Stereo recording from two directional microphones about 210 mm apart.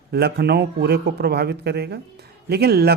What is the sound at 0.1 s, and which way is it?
Speech, 50° right (ahead or behind).